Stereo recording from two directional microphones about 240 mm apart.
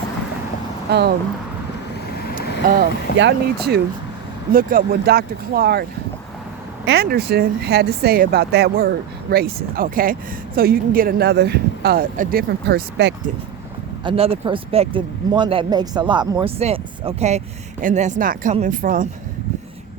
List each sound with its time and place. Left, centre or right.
0.9 s speech: right
3.2 s speech: right
6.8 s speech: right
14.0 s speech: right